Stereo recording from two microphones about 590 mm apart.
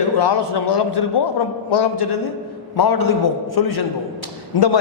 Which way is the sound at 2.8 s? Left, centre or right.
Left.